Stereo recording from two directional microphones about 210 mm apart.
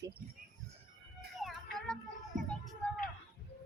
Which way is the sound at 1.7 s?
5° left (ahead or behind).